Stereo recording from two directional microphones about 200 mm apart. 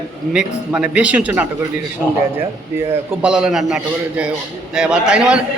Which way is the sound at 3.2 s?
5° right (ahead or behind).